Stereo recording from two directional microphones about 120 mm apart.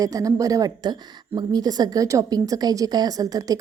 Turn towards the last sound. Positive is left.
turn(degrees=-30)  # may be behind; listen again after turning